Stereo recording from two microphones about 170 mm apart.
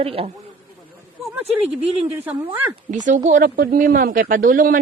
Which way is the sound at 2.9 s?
45° right (ahead or behind).